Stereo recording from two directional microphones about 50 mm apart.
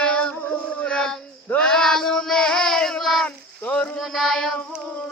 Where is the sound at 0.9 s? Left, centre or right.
Centre.